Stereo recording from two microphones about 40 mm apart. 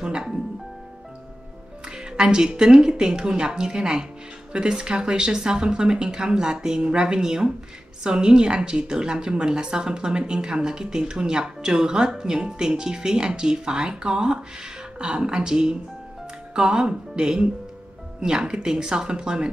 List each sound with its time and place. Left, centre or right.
0.0 s music: right
1.9 s a woman's voice: centre